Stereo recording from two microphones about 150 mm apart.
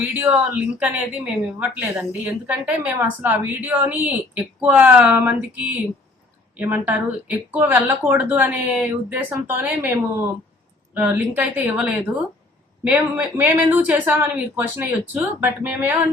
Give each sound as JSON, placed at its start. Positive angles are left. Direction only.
{"t": 0.2, "sound": "a woman's voice", "side_deg": -10}